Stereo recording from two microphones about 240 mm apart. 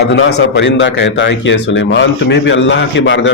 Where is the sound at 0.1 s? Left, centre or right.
Left.